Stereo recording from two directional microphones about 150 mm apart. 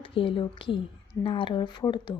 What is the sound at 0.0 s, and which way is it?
A woman's voice, 35° left (ahead or behind).